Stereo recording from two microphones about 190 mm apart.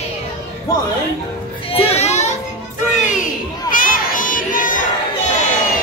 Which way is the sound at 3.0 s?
40° left (ahead or behind).